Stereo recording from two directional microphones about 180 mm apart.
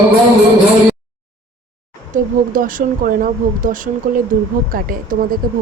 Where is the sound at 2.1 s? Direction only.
50° right (ahead or behind).